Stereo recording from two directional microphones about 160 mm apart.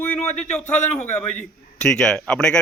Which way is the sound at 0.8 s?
45° left (ahead or behind).